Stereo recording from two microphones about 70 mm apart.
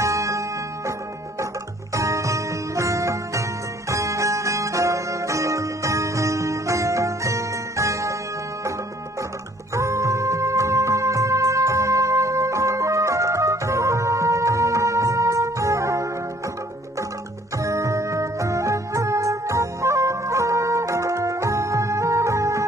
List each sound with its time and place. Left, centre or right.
0.0 s music: right
2.0 s music: right
9.8 s music: right
17.6 s music: right